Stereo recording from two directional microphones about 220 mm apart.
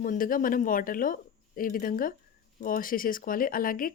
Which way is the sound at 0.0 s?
40° left (ahead or behind).